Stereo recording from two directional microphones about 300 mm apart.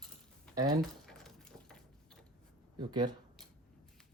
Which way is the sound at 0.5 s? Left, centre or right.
Centre.